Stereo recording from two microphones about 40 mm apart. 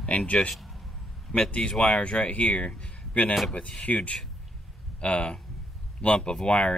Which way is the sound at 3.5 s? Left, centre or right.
Left.